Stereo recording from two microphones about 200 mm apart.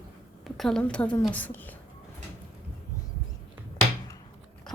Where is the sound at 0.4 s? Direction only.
Centre (ahead or behind).